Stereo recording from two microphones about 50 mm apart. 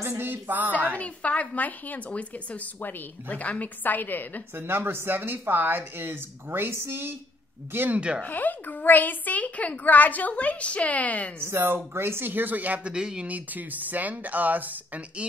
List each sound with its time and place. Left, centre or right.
0.2 s speech: right
0.9 s a woman's voice: left
2.8 s a woman's voice: left
4.6 s speech: right
7.9 s speech: right
8.2 s a woman's voice: left
11.4 s speech: right
12.8 s speech: centre
13.3 s speech: right